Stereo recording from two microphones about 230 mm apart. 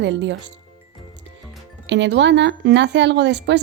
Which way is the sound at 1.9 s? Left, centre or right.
Right.